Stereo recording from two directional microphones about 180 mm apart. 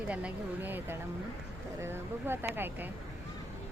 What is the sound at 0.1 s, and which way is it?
Speech, 5° right (ahead or behind).